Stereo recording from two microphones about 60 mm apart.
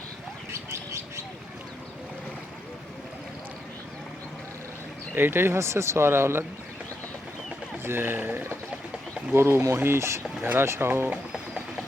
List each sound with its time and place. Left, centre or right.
0.5 s a sound: right
5.1 s speech: right
7.9 s speech: right
9.3 s speech: right
10.4 s speech: right